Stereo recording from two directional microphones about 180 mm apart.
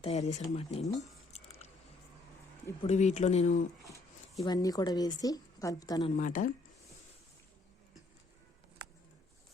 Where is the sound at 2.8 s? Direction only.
40° left (ahead or behind).